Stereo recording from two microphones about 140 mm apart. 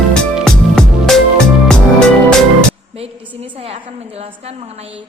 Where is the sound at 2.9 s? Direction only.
45° right (ahead or behind).